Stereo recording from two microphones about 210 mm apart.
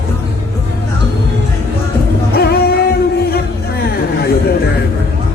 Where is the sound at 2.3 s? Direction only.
50° left (ahead or behind).